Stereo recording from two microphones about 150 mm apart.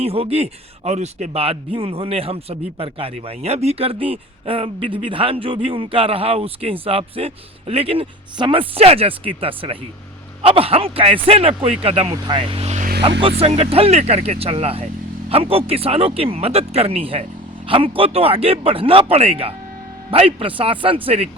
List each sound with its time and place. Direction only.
0.0 s speech: 40° right (ahead or behind)
13.0 s speech: 35° right (ahead or behind)